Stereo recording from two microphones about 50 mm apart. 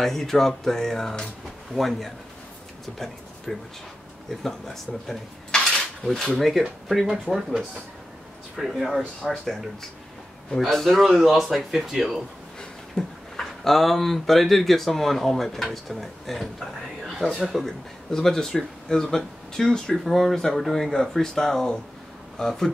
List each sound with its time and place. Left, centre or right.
0.0 s speech: centre
3.5 s speech: centre
5.5 s cutlery: centre
6.4 s speech: centre
12.9 s speech: centre
18.1 s speech: centre